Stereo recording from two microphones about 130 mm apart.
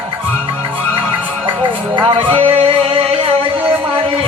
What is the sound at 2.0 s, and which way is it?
Music, 40° right (ahead or behind).